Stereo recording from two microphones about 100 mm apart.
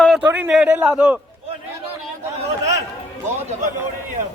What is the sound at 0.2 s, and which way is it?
A man's voice, 15° right (ahead or behind).